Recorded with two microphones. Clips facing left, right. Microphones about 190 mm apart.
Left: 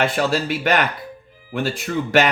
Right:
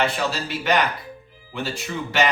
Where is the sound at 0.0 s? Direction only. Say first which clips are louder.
Left 4 dB; 50° left (ahead or behind).